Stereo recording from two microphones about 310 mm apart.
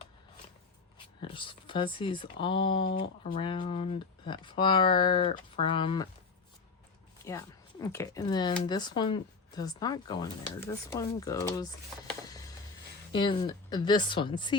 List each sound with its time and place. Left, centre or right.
1.2 s speech: centre
7.3 s speech: centre
13.1 s speech: centre